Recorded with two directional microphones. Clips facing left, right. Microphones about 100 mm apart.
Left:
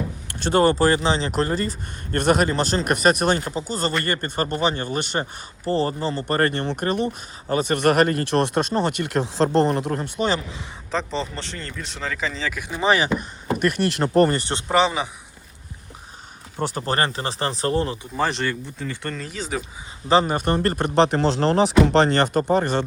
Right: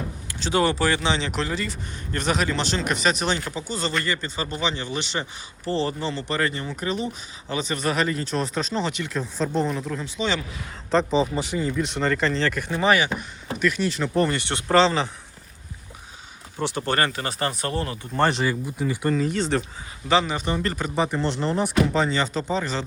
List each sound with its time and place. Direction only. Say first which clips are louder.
0.3 s speech: left 4 dB; 50° left (ahead or behind)
10.9 s speech: right 6 dB; 5° right (ahead or behind)
13.1 s speech: left 6 dB; 55° left (ahead or behind)
14.3 s speech: left 2 dB; 35° left (ahead or behind)
14.7 s speech: right 1 dB; 15° left (ahead or behind)
16.6 s speech: left 1 dB; 40° left (ahead or behind)
18.2 s speech: right 2 dB; centre (ahead or behind)
20.1 s speech: left 3 dB; 40° left (ahead or behind)
20.9 s speech: left 7 dB; 85° left; by 22.9 s 55° left (ahead or behind)